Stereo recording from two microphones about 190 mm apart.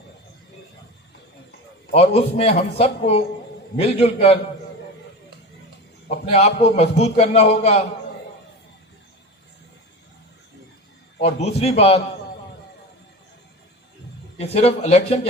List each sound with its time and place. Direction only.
2.0 s a man's voice: 30° left (ahead or behind)
6.3 s a man's voice: 35° left (ahead or behind)
11.2 s a man's voice: 35° left (ahead or behind)
14.3 s a man's voice: 30° left (ahead or behind)